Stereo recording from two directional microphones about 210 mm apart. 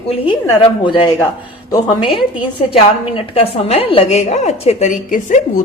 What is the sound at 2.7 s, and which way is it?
A woman's voice, 25° left (ahead or behind).